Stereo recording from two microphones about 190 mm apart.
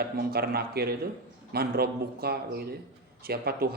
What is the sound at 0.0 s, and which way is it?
A man's voice, 55° right (ahead or behind).